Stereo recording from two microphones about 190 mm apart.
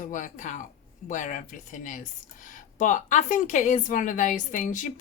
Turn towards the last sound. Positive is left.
turn(degrees=40)  # may be behind; listen again after turning